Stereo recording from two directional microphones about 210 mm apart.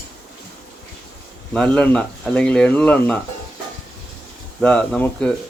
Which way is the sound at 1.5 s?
5° left (ahead or behind).